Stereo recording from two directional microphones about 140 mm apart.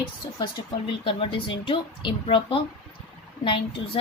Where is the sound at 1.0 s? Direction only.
40° left (ahead or behind).